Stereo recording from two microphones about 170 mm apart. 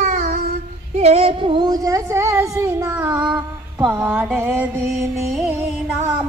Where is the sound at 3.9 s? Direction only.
5° right (ahead or behind).